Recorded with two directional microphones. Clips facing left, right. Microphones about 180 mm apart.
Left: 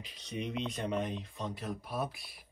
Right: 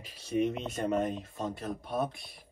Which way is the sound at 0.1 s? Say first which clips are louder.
Right 11 dB; 5° right (ahead or behind).